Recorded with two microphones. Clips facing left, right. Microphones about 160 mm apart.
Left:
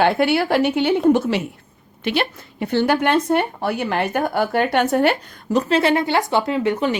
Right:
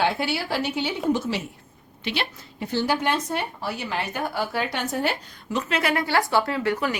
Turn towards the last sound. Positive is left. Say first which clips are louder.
# left 5 dB
turn(degrees=20)  # may be behind; listen again after turning